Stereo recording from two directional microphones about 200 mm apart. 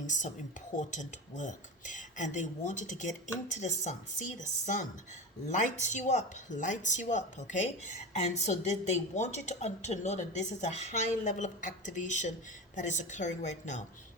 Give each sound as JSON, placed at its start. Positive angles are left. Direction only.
{"t": 0.0, "sound": "a woman's voice", "side_deg": 40}